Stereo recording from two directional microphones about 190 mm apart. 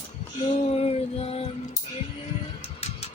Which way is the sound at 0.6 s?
35° left (ahead or behind).